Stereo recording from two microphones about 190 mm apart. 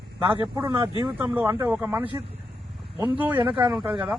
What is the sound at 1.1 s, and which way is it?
Speech, 10° right (ahead or behind).